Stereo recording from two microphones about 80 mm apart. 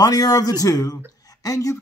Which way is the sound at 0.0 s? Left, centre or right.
Left.